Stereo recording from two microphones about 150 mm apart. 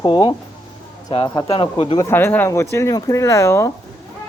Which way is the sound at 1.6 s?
35° left (ahead or behind).